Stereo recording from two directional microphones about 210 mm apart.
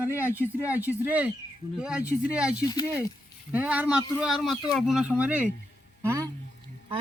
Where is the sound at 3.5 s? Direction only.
10° right (ahead or behind).